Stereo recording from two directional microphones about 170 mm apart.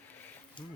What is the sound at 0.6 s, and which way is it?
Speech, 30° left (ahead or behind).